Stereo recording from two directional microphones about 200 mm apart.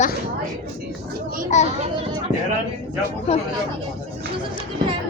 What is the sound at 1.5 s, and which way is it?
Speech, 35° left (ahead or behind).